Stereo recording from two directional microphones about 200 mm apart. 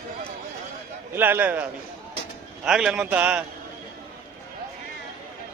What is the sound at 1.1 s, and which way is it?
A man's voice, 10° right (ahead or behind).